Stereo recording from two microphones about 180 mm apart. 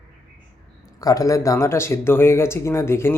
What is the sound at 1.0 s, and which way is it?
Speech, 20° left (ahead or behind).